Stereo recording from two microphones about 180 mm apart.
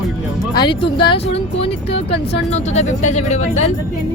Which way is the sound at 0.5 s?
25° left (ahead or behind).